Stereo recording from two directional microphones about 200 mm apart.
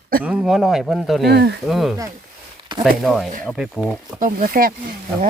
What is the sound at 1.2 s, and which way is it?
Speech, 55° right (ahead or behind).